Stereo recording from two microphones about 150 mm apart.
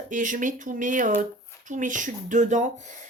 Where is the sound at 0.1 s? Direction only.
60° right (ahead or behind).